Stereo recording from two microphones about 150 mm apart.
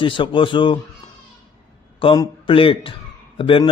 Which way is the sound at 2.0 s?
35° left (ahead or behind).